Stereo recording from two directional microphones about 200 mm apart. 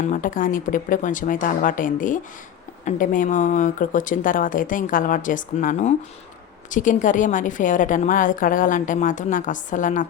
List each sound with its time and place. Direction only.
0.1 s a woman's voice: 40° left (ahead or behind)